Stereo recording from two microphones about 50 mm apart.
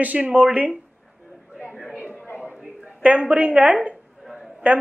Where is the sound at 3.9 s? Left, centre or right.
Centre.